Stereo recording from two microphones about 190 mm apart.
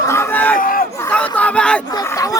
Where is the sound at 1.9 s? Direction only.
15° left (ahead or behind).